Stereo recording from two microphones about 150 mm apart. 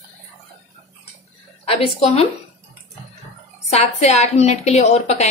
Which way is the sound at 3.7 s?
45° left (ahead or behind).